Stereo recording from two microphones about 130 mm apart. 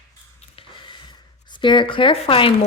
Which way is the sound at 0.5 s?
40° left (ahead or behind).